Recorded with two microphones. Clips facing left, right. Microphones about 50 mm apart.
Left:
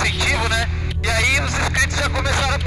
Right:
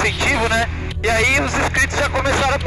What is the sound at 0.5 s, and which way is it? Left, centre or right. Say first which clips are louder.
Vehicle: right 3 dB; right.